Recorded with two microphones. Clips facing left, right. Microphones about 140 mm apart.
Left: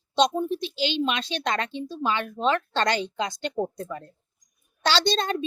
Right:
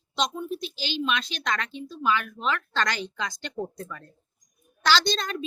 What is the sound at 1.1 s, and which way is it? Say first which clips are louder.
Speech: left 2 dB; 30° left (ahead or behind).